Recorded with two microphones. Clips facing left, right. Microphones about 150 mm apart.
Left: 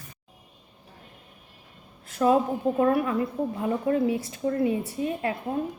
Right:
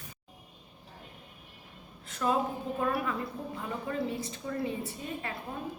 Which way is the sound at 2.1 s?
55° left (ahead or behind).